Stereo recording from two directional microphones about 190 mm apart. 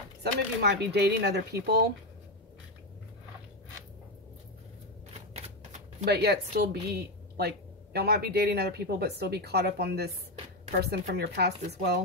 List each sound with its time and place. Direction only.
0.2 s a woman's voice: 60° right (ahead or behind)
5.1 s shuffling cards: 35° right (ahead or behind)
6.0 s a woman's voice: 60° right (ahead or behind)